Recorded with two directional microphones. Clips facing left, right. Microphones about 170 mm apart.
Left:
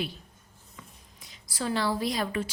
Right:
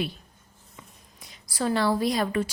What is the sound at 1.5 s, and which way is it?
Speech, 50° right (ahead or behind).